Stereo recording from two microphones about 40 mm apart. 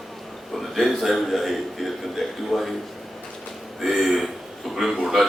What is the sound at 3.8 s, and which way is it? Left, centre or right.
A man's voice, centre.